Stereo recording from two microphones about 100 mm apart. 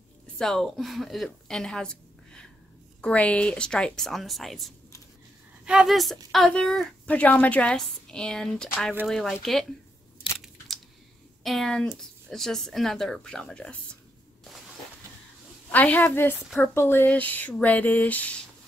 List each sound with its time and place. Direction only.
0.4 s speech: 5° left (ahead or behind)
3.0 s a woman's voice: 10° left (ahead or behind)
11.4 s speech: 5° left (ahead or behind)
15.7 s a woman's voice: 15° left (ahead or behind)
16.3 s speech: centre (ahead or behind)
16.7 s a woman's voice: 25° left (ahead or behind)